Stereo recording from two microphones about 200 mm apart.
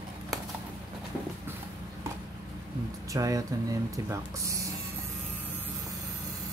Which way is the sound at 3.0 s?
15° right (ahead or behind).